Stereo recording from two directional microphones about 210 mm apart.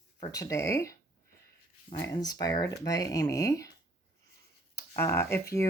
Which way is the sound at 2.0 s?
20° left (ahead or behind).